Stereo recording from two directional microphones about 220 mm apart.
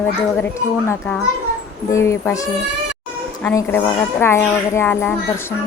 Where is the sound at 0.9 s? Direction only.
5° left (ahead or behind).